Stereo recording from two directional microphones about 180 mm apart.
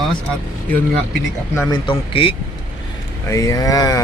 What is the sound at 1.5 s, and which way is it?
Speech, 25° left (ahead or behind).